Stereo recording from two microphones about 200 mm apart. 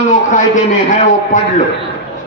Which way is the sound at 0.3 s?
40° left (ahead or behind).